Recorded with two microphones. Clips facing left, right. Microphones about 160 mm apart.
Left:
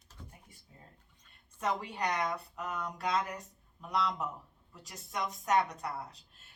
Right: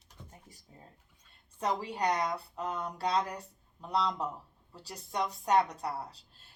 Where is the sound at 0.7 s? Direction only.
30° right (ahead or behind).